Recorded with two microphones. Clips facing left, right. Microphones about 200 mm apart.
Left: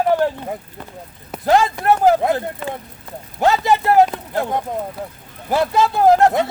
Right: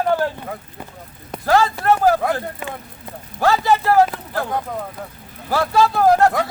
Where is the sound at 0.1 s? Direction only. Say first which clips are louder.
Left 3 dB; 20° left (ahead or behind).